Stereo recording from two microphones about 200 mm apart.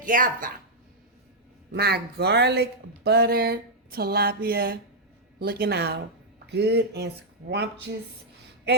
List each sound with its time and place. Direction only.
0.0 s speech: 45° right (ahead or behind)
1.7 s speech: 50° right (ahead or behind)